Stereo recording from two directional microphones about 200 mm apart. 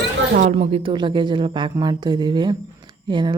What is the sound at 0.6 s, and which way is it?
Speech, 25° right (ahead or behind).